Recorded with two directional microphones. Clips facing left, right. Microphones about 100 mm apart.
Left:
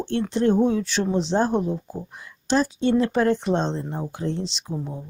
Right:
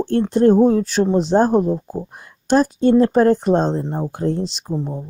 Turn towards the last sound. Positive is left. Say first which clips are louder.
# right 6 dB
turn(degrees=-50)  # may be behind; listen again after turning